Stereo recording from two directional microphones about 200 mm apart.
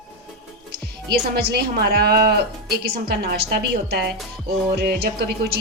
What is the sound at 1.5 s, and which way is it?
A woman's voice, 50° right (ahead or behind).